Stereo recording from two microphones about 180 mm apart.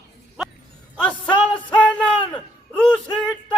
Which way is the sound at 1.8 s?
5° left (ahead or behind).